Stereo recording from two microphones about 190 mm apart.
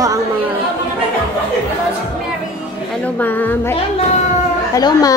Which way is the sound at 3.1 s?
10° left (ahead or behind).